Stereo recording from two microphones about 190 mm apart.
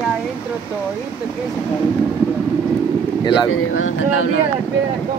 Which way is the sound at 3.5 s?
90° left.